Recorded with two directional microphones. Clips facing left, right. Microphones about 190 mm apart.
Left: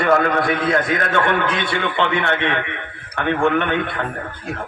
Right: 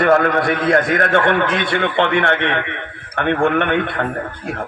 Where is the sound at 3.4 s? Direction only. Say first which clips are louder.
Right 1 dB; 60° right (ahead or behind).